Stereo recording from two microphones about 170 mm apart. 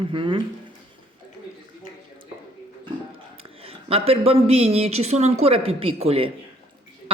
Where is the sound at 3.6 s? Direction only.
35° right (ahead or behind).